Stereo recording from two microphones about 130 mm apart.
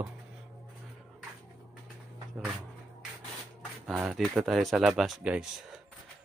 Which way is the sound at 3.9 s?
5° right (ahead or behind).